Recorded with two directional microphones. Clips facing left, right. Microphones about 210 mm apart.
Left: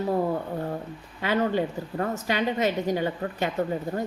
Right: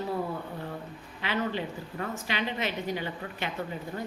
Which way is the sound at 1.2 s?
45° left (ahead or behind).